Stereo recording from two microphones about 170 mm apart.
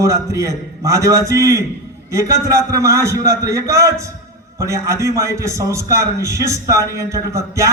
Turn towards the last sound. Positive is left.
turn(degrees=-20)  # may be behind; listen again after turning